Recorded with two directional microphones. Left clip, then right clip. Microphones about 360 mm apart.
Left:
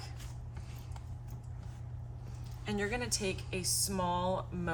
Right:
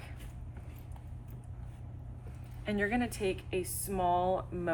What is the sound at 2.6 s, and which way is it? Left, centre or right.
Speech, centre.